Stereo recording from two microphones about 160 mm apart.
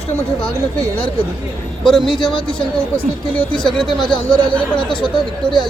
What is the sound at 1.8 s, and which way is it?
Speech, centre (ahead or behind).